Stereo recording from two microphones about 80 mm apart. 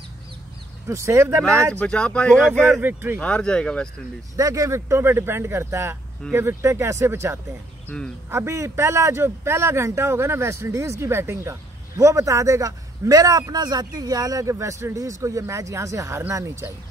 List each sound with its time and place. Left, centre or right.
0.8 s a man's voice: right
1.8 s speech: centre
2.7 s speech: right
3.2 s speech: centre
4.4 s a man's voice: right
7.9 s speech: centre
8.3 s a man's voice: right